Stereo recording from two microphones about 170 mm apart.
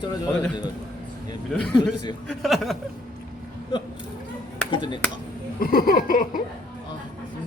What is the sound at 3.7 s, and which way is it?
Speech, 25° left (ahead or behind).